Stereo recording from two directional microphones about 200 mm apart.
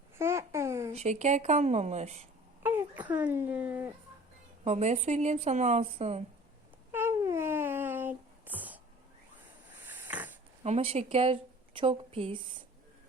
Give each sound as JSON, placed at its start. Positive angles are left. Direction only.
{"t": 0.2, "sound": "babbling", "side_deg": -15}
{"t": 0.9, "sound": "speech", "side_deg": -35}
{"t": 2.6, "sound": "speech", "side_deg": -10}
{"t": 4.6, "sound": "speech", "side_deg": -35}
{"t": 6.9, "sound": "a sound", "side_deg": -10}
{"t": 9.8, "sound": "mechanisms", "side_deg": -10}
{"t": 10.6, "sound": "a woman's voice", "side_deg": -30}